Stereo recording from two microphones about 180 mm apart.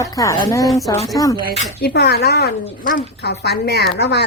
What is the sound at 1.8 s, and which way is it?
A woman's voice, 65° left (ahead or behind).